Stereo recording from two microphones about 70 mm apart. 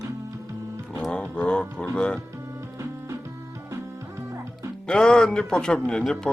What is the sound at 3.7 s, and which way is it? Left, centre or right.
Music, right.